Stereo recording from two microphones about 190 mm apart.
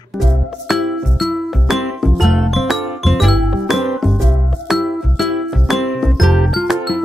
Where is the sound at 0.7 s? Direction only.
Centre (ahead or behind).